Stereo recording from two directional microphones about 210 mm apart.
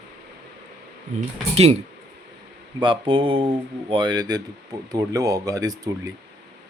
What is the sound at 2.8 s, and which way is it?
Speech, 25° right (ahead or behind).